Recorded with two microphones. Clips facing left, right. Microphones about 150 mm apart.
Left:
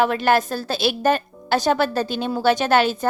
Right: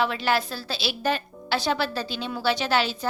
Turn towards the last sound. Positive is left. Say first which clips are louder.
# left 6 dB
turn(degrees=50)  # may be behind; listen again after turning